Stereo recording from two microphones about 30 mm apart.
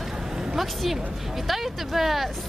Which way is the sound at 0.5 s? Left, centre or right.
Centre.